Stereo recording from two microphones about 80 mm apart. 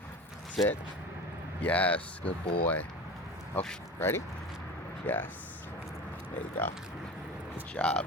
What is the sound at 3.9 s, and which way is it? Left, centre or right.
Speech, left.